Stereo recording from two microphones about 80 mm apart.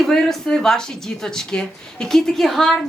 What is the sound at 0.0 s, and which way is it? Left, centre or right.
A woman's voice, centre.